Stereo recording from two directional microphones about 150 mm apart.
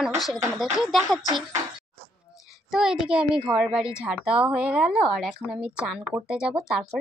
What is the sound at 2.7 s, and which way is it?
Speech, 5° right (ahead or behind).